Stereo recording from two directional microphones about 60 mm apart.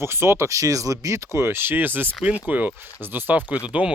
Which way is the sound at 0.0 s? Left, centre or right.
Right.